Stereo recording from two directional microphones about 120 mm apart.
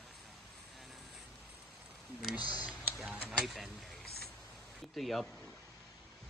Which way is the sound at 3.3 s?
Centre (ahead or behind).